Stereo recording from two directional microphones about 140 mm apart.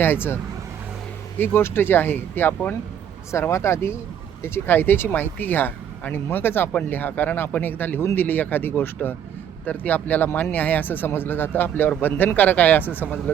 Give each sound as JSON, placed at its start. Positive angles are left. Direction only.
{"t": 0.0, "sound": "speech", "side_deg": 15}
{"t": 1.4, "sound": "speech", "side_deg": 15}